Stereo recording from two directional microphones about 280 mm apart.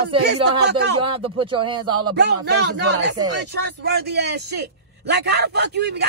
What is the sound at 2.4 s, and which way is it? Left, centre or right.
A man's voice, right.